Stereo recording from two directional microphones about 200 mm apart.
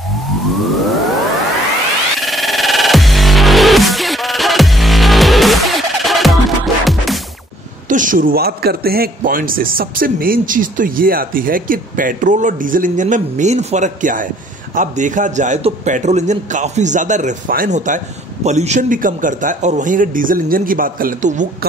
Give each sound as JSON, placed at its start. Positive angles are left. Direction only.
{"t": 0.7, "sound": "music", "side_deg": 0}
{"t": 2.1, "sound": "music", "side_deg": 0}
{"t": 7.9, "sound": "speech", "side_deg": -40}